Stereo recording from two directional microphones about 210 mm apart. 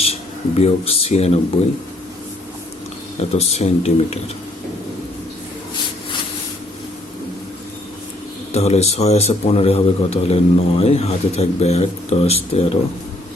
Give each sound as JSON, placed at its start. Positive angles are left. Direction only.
{"t": 0.0, "sound": "speech", "side_deg": 30}
{"t": 3.2, "sound": "speech", "side_deg": 30}
{"t": 8.5, "sound": "a man's voice", "side_deg": 30}